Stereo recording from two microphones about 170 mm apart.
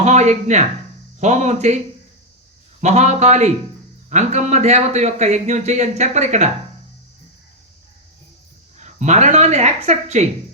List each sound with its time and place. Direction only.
0.0 s a man's voice: 40° right (ahead or behind)
2.8 s a man's voice: 45° right (ahead or behind)
8.8 s speech: 45° right (ahead or behind)